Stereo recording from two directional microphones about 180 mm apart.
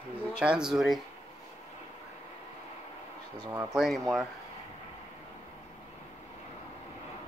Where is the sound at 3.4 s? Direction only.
15° right (ahead or behind).